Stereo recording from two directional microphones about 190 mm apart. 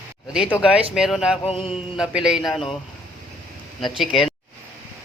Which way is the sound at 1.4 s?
30° left (ahead or behind).